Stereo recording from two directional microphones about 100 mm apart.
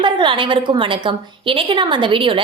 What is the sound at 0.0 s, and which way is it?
A woman's voice, 55° right (ahead or behind).